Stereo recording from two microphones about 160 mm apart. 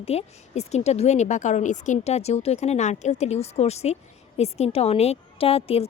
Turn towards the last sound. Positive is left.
turn(degrees=35)  # may be behind; listen again after turning